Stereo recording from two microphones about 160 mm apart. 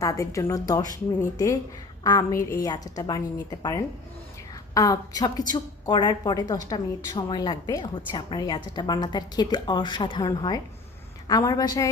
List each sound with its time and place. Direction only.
0.0 s a woman's voice: 20° left (ahead or behind)